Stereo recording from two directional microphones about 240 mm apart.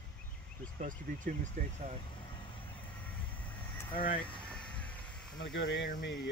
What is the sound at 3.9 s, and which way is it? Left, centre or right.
Speech, left.